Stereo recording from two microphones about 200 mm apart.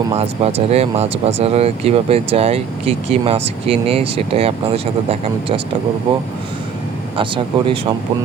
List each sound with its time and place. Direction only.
0.1 s speech: 30° right (ahead or behind)
7.2 s speech: 25° right (ahead or behind)